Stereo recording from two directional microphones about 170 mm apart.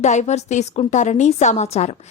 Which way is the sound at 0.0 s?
45° left (ahead or behind).